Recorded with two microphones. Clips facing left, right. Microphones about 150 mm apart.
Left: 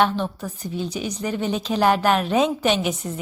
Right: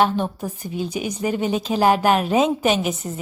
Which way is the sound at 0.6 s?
10° right (ahead or behind).